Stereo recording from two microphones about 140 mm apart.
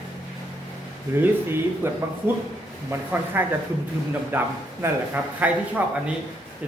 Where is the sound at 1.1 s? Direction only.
15° right (ahead or behind).